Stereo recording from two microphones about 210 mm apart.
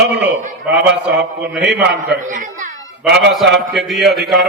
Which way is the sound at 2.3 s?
40° right (ahead or behind).